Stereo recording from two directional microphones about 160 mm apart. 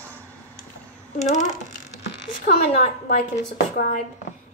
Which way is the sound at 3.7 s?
65° left (ahead or behind).